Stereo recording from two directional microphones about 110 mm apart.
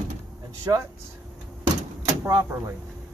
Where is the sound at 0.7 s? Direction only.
30° right (ahead or behind).